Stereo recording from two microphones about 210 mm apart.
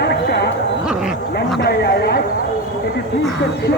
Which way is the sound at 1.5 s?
50° left (ahead or behind).